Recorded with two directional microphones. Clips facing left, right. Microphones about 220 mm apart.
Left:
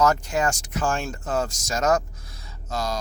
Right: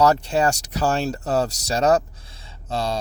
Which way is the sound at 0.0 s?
35° right (ahead or behind).